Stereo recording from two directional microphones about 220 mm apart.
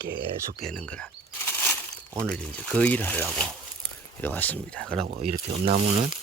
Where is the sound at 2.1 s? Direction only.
5° left (ahead or behind).